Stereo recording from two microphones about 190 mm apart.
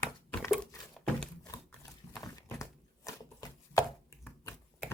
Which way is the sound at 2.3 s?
20° left (ahead or behind).